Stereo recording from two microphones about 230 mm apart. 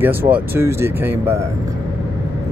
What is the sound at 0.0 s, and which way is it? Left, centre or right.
Speech, centre.